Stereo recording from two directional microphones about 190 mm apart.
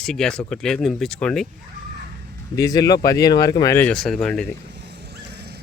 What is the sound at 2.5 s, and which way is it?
Speech, 20° left (ahead or behind).